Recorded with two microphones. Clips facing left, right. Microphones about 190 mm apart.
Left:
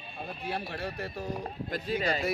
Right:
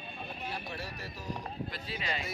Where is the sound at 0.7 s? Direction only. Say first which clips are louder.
Left 6 dB; 60° left (ahead or behind).